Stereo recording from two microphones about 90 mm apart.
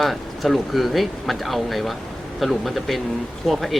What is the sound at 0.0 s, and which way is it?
Speech, centre (ahead or behind).